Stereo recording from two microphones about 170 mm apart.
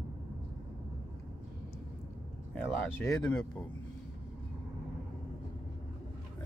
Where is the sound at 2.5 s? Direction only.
10° left (ahead or behind).